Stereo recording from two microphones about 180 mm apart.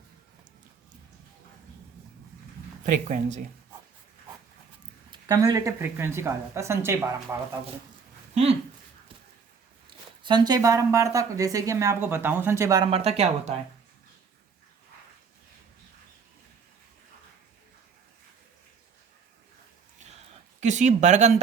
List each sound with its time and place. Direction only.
2.8 s speech: 45° right (ahead or behind)
5.1 s speech: 20° right (ahead or behind)
9.8 s speech: 25° right (ahead or behind)
12.9 s speech: 35° right (ahead or behind)
20.6 s speech: 40° right (ahead or behind)